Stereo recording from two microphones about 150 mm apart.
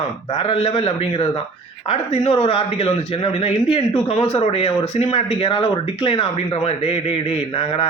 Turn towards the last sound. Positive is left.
turn(degrees=40)  # may be behind; listen again after turning